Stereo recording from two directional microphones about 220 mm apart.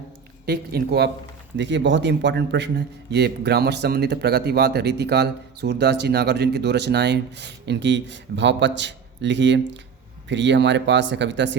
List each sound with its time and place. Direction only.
0.4 s a man's voice: 45° right (ahead or behind)